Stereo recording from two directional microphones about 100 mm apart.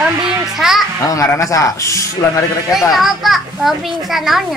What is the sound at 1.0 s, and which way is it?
Speech, 35° left (ahead or behind).